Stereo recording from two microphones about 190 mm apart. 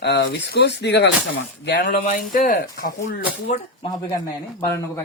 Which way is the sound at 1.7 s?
50° left (ahead or behind).